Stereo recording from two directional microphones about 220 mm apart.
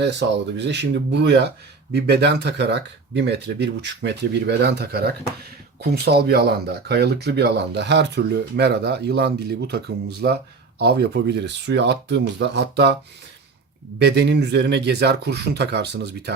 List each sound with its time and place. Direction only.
0.0 s speech: 50° right (ahead or behind)
14.0 s speech: 50° right (ahead or behind)